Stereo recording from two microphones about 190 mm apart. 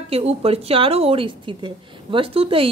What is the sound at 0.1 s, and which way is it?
A woman's voice, 30° right (ahead or behind).